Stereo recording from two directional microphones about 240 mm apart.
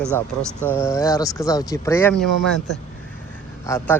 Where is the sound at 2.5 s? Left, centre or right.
Centre.